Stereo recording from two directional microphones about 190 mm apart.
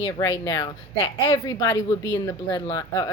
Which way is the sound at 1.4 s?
15° left (ahead or behind).